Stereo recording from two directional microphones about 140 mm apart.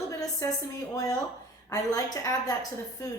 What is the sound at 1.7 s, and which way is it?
Speech, 25° left (ahead or behind).